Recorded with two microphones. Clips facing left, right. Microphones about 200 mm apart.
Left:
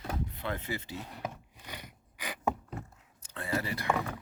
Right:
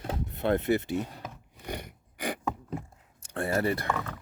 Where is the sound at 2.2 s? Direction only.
55° right (ahead or behind).